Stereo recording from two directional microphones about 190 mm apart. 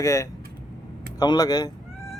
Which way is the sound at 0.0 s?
15° left (ahead or behind).